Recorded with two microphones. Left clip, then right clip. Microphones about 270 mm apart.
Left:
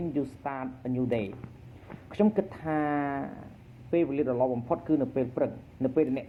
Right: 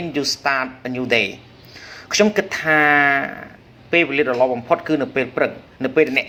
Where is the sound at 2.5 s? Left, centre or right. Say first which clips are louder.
Right 15 dB; right.